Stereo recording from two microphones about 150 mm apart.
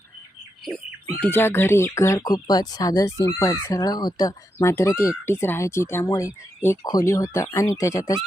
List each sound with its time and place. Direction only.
1.2 s speech: 15° left (ahead or behind)